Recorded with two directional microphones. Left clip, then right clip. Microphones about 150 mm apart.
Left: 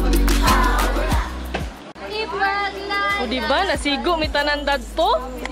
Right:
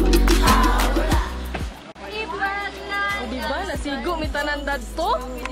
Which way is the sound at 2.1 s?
25° left (ahead or behind).